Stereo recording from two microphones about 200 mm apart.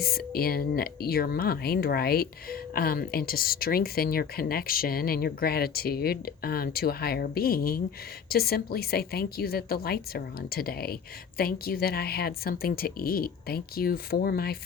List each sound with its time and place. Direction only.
0.0 s speech: 50° left (ahead or behind)